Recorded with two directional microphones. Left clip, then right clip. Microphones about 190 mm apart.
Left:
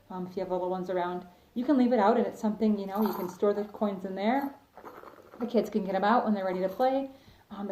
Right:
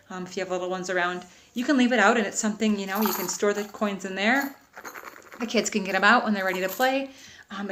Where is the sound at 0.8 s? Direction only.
15° right (ahead or behind).